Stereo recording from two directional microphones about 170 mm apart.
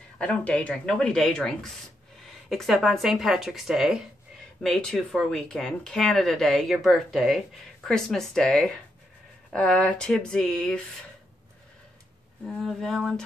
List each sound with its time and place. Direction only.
0.2 s speech: 5° left (ahead or behind)
12.4 s speech: centre (ahead or behind)